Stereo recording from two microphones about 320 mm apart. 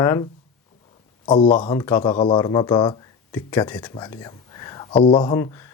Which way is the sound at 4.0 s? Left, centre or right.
Centre.